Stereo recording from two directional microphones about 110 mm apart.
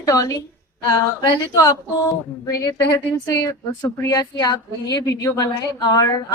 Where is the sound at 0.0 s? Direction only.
30° left (ahead or behind).